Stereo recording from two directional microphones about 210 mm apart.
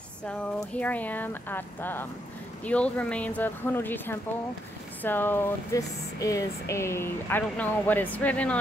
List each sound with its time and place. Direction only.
0.6 s speech: 5° left (ahead or behind)